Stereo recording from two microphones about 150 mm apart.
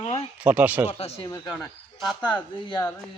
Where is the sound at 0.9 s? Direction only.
45° left (ahead or behind).